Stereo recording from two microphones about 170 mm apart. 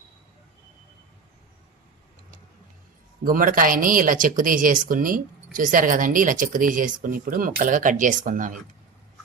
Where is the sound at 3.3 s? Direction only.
55° right (ahead or behind).